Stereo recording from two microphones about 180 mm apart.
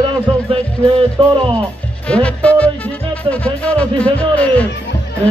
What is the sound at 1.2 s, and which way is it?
Speech, 30° right (ahead or behind).